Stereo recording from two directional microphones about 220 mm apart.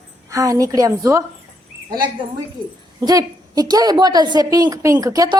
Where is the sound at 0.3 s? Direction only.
15° right (ahead or behind).